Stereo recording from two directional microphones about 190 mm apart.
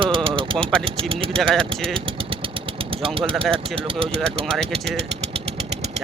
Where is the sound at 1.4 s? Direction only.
Centre (ahead or behind).